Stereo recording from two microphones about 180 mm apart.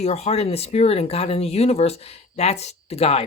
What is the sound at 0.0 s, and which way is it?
Speech, 35° left (ahead or behind).